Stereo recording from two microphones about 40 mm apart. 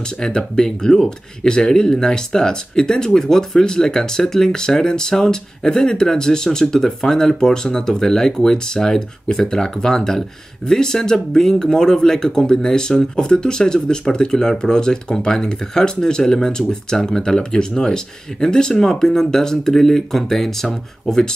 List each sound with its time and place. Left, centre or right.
0.2 s speech: centre